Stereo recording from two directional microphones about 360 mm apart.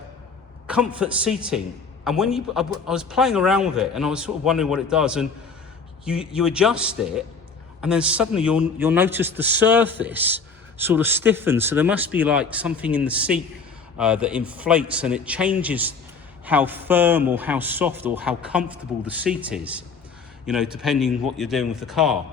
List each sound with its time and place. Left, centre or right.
0.7 s a man's voice: centre